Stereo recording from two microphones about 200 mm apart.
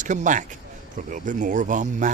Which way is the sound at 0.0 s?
40° right (ahead or behind).